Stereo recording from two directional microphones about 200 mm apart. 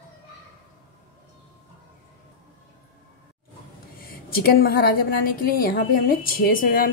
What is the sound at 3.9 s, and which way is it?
A woman's voice, 50° left (ahead or behind).